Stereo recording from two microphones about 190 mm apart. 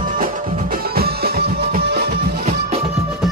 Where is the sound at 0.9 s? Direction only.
55° right (ahead or behind).